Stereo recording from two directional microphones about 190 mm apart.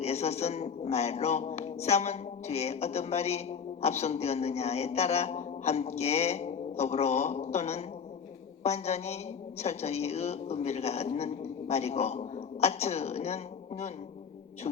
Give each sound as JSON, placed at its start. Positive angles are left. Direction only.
{"t": 0.0, "sound": "a man's voice", "side_deg": 35}